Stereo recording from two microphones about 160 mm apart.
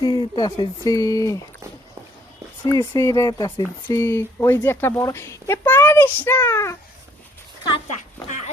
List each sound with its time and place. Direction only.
0.0 s speech: 25° left (ahead or behind)
2.6 s speech: 20° left (ahead or behind)